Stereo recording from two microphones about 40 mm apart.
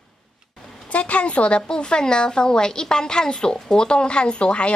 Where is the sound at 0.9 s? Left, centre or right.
Left.